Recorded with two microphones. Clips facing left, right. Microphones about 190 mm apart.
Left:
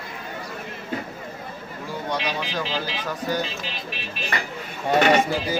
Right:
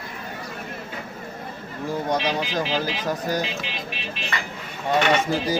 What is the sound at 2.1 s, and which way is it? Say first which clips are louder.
Speech: right 2 dB; 45° right (ahead or behind).